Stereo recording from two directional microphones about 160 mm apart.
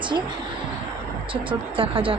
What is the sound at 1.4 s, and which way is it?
Speech, 35° right (ahead or behind).